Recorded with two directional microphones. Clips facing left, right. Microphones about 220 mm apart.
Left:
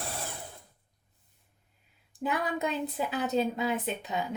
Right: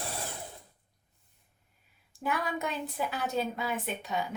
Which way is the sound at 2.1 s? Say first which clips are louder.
Left 2 dB; 20° left (ahead or behind).